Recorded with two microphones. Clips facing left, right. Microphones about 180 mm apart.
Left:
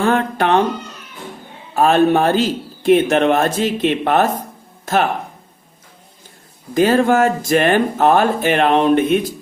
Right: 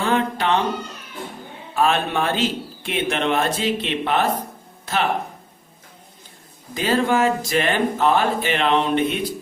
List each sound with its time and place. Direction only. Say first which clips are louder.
0.0 s a man's voice: left 4 dB; 50° left (ahead or behind)
1.7 s a man's voice: left 7 dB; 40° left (ahead or behind)
6.7 s a man's voice: left 6 dB; 45° left (ahead or behind)